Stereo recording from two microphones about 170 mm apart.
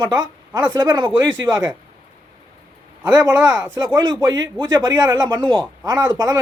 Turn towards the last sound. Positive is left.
turn(degrees=-20)  # may be behind; listen again after turning